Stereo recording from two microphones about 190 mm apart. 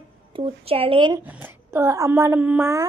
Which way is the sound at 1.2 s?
10° right (ahead or behind).